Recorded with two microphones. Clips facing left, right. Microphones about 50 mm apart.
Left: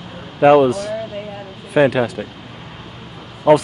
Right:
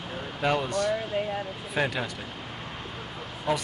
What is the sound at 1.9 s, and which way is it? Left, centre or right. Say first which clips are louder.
Speech: left 13 dB; left.